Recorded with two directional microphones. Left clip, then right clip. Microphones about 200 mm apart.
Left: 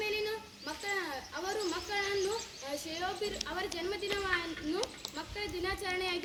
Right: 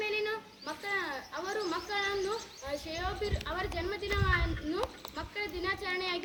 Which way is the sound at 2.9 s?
15° left (ahead or behind).